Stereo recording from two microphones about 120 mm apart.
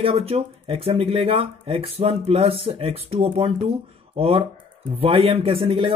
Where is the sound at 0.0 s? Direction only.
55° right (ahead or behind).